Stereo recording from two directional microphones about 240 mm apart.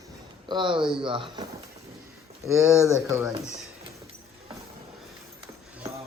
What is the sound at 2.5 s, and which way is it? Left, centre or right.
Speech, centre.